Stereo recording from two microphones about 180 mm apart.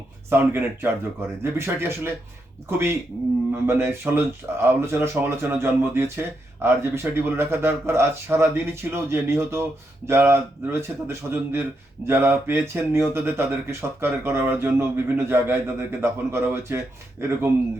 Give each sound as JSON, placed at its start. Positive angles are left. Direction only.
{"t": 0.3, "sound": "speech", "side_deg": -15}